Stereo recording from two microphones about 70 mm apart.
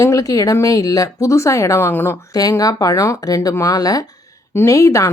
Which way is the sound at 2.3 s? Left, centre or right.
Left.